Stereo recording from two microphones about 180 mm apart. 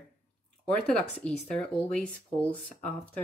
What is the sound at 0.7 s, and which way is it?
Speech, 5° left (ahead or behind).